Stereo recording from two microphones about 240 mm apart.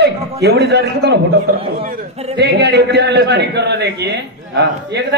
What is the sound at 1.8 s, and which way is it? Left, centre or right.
Speech, right.